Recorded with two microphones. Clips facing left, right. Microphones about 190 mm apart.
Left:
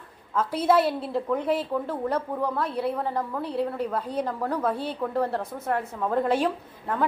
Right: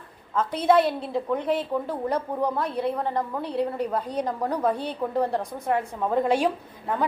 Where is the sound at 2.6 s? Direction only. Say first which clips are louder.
Right 1 dB; 5° left (ahead or behind).